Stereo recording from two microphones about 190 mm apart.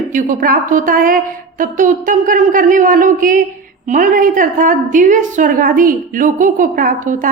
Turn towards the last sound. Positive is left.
turn(degrees=-45)  # may be behind; listen again after turning